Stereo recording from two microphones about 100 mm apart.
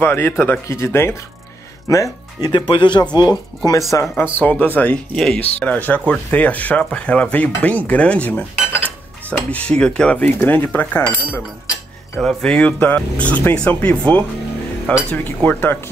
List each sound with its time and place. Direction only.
0.0 s speech: 20° left (ahead or behind)
2.5 s speech: 55° left (ahead or behind)
4.2 s speech: 15° left (ahead or behind)
12.2 s speech: 5° left (ahead or behind)